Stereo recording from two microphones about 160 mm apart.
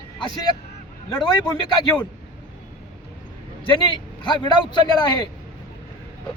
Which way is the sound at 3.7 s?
30° left (ahead or behind).